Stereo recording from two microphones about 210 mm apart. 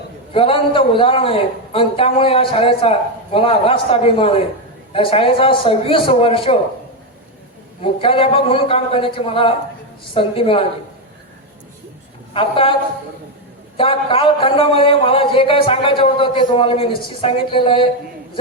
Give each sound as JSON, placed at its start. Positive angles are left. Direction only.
{"t": 0.3, "sound": "a man's voice", "side_deg": 25}
{"t": 7.8, "sound": "a man's voice", "side_deg": 25}
{"t": 12.3, "sound": "a man's voice", "side_deg": 25}
{"t": 13.7, "sound": "a man's voice", "side_deg": 25}